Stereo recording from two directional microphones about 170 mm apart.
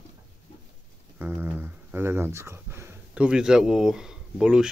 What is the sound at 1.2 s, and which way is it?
Speech, 15° right (ahead or behind).